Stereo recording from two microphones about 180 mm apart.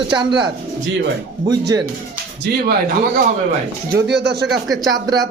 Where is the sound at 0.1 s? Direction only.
25° right (ahead or behind).